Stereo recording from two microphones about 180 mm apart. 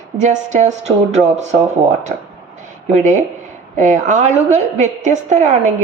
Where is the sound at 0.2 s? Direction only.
40° right (ahead or behind).